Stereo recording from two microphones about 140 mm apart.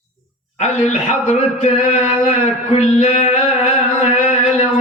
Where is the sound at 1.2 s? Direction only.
50° left (ahead or behind).